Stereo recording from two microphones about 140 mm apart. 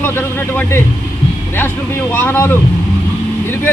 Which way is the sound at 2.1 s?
15° left (ahead or behind).